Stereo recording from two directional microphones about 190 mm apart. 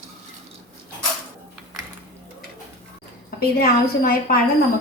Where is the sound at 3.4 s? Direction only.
50° left (ahead or behind).